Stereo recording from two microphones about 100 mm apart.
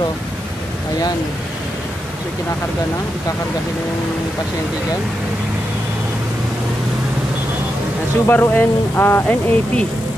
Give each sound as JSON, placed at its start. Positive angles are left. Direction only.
{"t": 8.3, "sound": "speech", "side_deg": 20}